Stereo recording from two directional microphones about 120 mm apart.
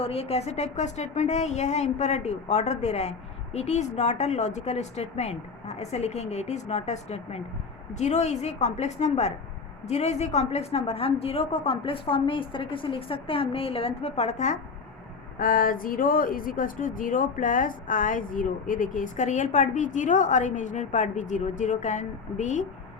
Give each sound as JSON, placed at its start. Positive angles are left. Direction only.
{"t": 0.0, "sound": "a woman's voice", "side_deg": 55}
{"t": 16.8, "sound": "a woman's voice", "side_deg": 90}